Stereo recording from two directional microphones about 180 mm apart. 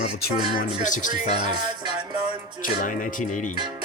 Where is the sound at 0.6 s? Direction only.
45° left (ahead or behind).